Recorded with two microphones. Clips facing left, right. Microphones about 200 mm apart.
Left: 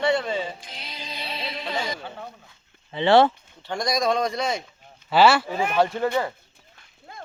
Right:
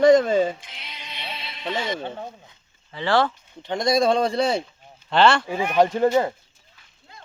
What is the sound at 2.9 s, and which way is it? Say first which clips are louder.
Speech: left 4 dB; 20° left (ahead or behind).